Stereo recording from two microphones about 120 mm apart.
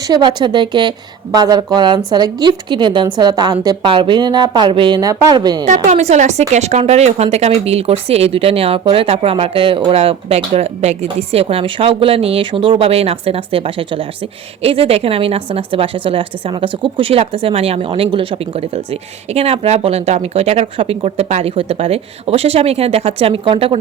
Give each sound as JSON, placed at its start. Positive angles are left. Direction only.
{"t": 0.0, "sound": "speech", "side_deg": -35}
{"t": 3.8, "sound": "speech", "side_deg": -45}
{"t": 5.6, "sound": "speech", "side_deg": -80}
{"t": 21.5, "sound": "speech", "side_deg": -55}